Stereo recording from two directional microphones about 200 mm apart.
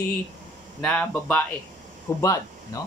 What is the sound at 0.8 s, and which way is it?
Speech, 5° left (ahead or behind).